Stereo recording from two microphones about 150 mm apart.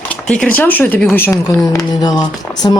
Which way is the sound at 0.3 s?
10° left (ahead or behind).